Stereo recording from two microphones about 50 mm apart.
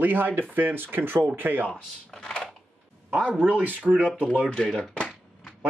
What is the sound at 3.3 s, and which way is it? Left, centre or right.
Speech, right.